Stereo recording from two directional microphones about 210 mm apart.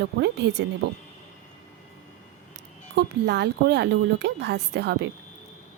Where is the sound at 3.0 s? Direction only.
55° right (ahead or behind).